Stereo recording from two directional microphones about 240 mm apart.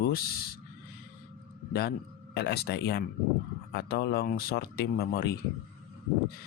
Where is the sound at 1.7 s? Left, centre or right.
Left.